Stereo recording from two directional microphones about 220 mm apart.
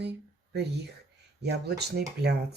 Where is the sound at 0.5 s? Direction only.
50° right (ahead or behind).